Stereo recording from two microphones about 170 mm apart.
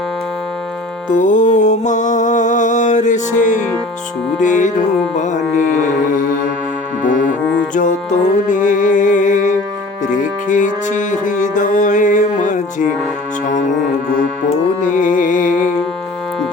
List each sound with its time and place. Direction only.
1.1 s music: 50° left (ahead or behind)
7.7 s music: 50° left (ahead or behind)
14.8 s music: 50° left (ahead or behind)